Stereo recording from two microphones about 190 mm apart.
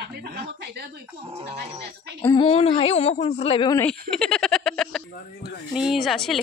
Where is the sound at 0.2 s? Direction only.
60° right (ahead or behind).